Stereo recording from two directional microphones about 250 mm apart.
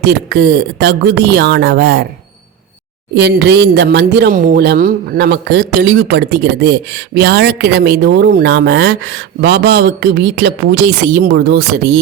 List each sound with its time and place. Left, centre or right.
0.0 s speech: right
3.2 s speech: right